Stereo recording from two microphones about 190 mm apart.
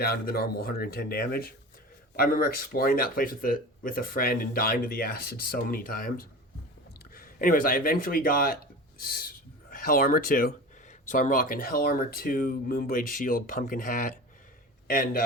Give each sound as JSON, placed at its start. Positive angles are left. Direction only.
{"t": 0.0, "sound": "a man's voice", "side_deg": 55}